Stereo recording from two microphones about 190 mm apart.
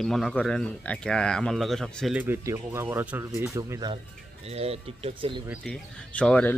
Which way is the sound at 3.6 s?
20° right (ahead or behind).